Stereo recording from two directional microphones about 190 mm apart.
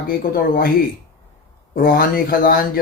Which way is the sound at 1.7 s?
50° left (ahead or behind).